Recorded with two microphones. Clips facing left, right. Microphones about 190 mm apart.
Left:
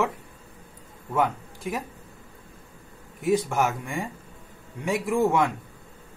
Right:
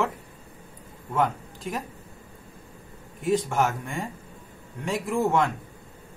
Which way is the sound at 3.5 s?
15° left (ahead or behind).